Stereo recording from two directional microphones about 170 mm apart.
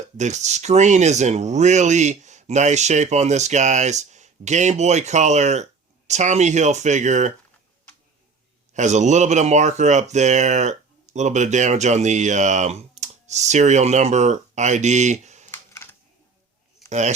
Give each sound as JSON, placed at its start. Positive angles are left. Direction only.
{"t": 0.2, "sound": "speech", "side_deg": -45}
{"t": 8.7, "sound": "speech", "side_deg": -45}
{"t": 15.5, "sound": "computer keyboard", "side_deg": 15}
{"t": 16.9, "sound": "speech", "side_deg": -45}